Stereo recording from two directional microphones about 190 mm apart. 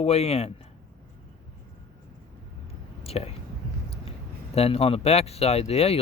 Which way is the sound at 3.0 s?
30° left (ahead or behind).